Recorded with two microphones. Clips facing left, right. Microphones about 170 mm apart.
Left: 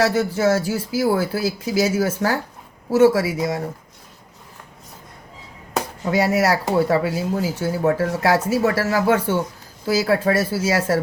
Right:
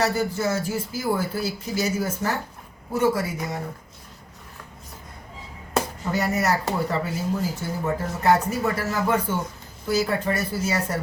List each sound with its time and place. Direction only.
0.0 s speech: 90° left
6.1 s speech: 85° left